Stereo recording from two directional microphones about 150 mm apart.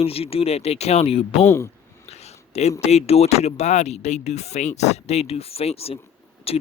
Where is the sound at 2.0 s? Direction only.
45° left (ahead or behind).